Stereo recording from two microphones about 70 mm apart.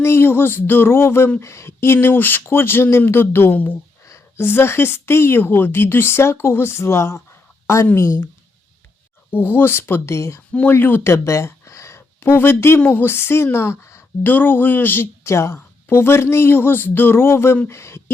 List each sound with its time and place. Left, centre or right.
0.0 s speech: left
4.0 s a sound: left
4.4 s speech: left
9.3 s speech: left
10.5 s speech: left